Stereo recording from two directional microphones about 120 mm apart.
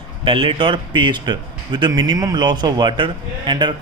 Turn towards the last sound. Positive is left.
turn(degrees=-40)  # may be behind; listen again after turning